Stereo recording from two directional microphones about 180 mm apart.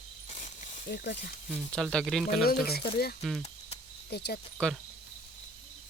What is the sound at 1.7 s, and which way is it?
Speech, 5° left (ahead or behind).